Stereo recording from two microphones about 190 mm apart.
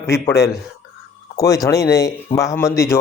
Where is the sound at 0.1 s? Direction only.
15° left (ahead or behind).